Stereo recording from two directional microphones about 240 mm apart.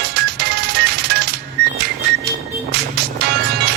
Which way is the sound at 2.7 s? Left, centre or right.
Right.